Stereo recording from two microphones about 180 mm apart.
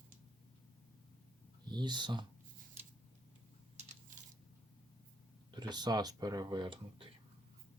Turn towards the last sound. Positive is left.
turn(degrees=-25)  # may be behind; listen again after turning